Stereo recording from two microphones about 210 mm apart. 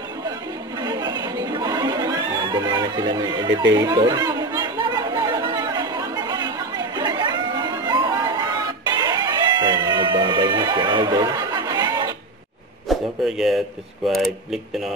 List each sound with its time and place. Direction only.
0.7 s chatter: 20° right (ahead or behind)
12.8 s a sound: centre (ahead or behind)
14.0 s speech: centre (ahead or behind)